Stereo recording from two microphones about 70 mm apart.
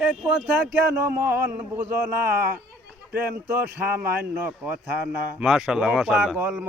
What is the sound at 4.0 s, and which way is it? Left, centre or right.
A man's voice, centre.